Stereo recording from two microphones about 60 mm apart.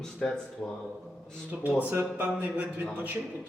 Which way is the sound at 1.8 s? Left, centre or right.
Right.